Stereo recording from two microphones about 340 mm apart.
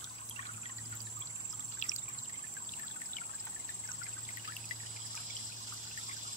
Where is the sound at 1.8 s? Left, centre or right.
Left.